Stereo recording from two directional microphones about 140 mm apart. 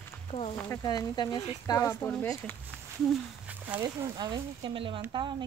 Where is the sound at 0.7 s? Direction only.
25° left (ahead or behind).